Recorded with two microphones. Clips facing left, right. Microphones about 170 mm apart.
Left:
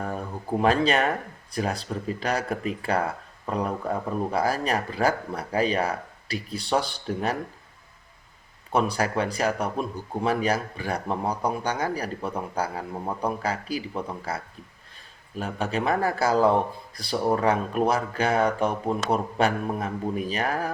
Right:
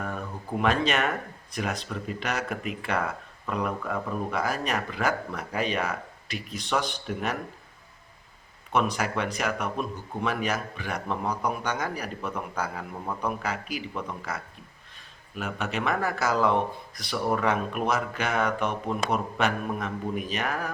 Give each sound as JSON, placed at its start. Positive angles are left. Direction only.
{"t": 0.6, "sound": "speech", "side_deg": 35}
{"t": 8.7, "sound": "speech", "side_deg": 30}